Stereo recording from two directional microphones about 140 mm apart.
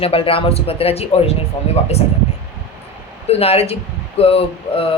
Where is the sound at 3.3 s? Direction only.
45° left (ahead or behind).